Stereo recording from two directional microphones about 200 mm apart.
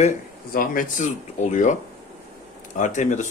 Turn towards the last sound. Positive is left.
turn(degrees=40)  # may be behind; listen again after turning